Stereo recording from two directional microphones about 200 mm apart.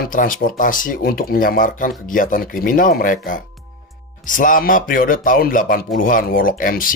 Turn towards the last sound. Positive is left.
turn(degrees=45)  # may be behind; listen again after turning